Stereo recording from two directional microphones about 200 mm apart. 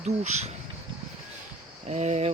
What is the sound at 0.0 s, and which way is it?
Speech, 35° right (ahead or behind).